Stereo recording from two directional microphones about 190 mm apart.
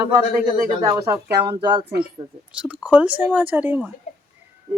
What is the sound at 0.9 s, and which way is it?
Speech, 15° right (ahead or behind).